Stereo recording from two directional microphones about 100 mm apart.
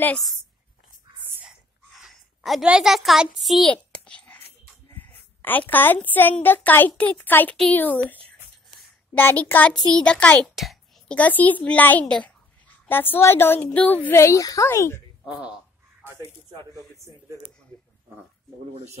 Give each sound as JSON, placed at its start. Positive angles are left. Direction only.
{"t": 1.4, "sound": "a sound", "side_deg": -5}
{"t": 2.6, "sound": "a child's voice", "side_deg": -5}
{"t": 3.6, "sound": "a sound", "side_deg": 10}
{"t": 4.9, "sound": "a woman's voice", "side_deg": 20}
{"t": 9.1, "sound": "a child's voice", "side_deg": 15}
{"t": 10.5, "sound": "a child's voice", "side_deg": 0}
{"t": 11.1, "sound": "a woman's voice", "side_deg": 15}
{"t": 14.1, "sound": "a woman's voice", "side_deg": 30}
{"t": 15.2, "sound": "speech", "side_deg": -10}